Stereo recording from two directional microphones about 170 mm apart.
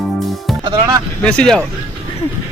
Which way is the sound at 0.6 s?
25° right (ahead or behind).